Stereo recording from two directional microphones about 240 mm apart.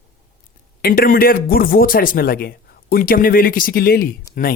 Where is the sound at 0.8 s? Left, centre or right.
Left.